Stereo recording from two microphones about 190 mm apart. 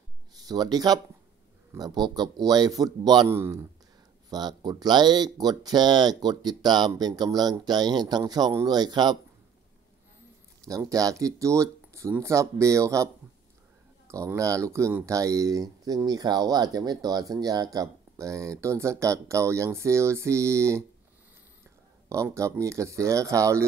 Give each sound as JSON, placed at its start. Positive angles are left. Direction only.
{"t": 0.3, "sound": "speech", "side_deg": -20}
{"t": 10.7, "sound": "speech", "side_deg": -15}
{"t": 22.1, "sound": "speech", "side_deg": -15}